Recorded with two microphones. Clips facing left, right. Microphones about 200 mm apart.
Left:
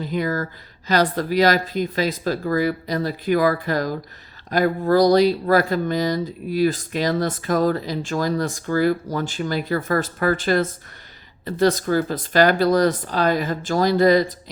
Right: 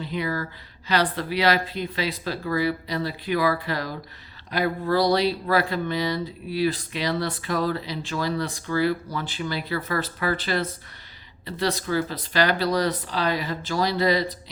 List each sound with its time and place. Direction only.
0.0 s speech: 45° left (ahead or behind)